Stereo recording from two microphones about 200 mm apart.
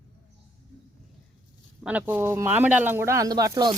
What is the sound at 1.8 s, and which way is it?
Speech, 5° right (ahead or behind).